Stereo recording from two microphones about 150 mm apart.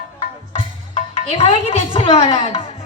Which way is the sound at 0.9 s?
45° left (ahead or behind).